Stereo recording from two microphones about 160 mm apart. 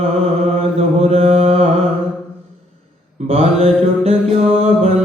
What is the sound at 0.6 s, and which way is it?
Mantra, 40° right (ahead or behind).